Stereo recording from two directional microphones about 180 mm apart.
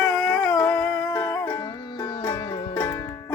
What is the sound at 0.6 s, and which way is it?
Music, 5° left (ahead or behind).